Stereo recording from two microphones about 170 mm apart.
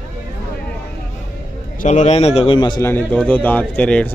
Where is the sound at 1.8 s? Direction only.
45° left (ahead or behind); by 2.9 s 25° left (ahead or behind).